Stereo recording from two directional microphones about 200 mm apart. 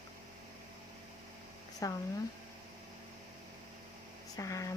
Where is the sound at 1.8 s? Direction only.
15° left (ahead or behind).